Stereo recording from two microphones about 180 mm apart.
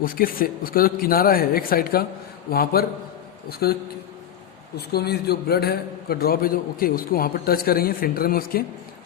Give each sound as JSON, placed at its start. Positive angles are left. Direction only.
{"t": 0.0, "sound": "a man's voice", "side_deg": 50}
{"t": 4.9, "sound": "a man's voice", "side_deg": 60}